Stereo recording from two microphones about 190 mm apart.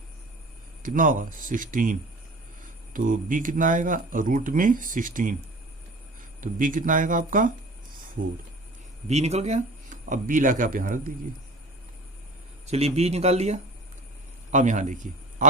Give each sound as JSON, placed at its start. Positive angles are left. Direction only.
{"t": 0.8, "sound": "speech", "side_deg": -45}
{"t": 6.4, "sound": "speech", "side_deg": -45}
{"t": 9.0, "sound": "speech", "side_deg": -35}
{"t": 12.6, "sound": "a man's voice", "side_deg": -35}